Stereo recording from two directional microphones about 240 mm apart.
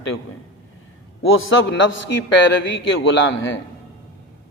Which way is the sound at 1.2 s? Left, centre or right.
Left.